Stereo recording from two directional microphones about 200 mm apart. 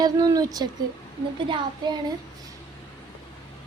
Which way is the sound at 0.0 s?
20° right (ahead or behind).